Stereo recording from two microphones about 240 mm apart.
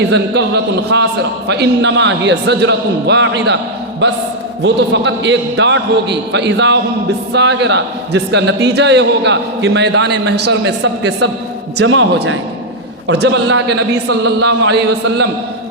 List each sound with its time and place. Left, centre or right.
0.1 s a man's voice: right
11.8 s a man's voice: right
13.1 s a man's voice: right